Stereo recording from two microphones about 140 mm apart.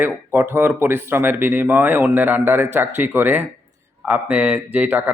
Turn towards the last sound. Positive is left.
turn(degrees=-10)  # may be behind; listen again after turning